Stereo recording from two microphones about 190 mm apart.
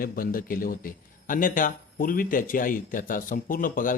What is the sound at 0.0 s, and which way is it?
Speech, 50° left (ahead or behind).